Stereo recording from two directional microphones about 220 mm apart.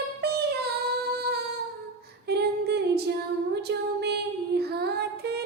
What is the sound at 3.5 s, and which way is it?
Child singing, 50° right (ahead or behind).